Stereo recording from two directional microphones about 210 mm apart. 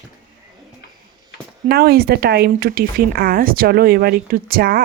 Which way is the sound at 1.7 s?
50° right (ahead or behind).